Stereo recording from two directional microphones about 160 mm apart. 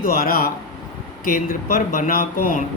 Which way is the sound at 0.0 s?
60° left (ahead or behind).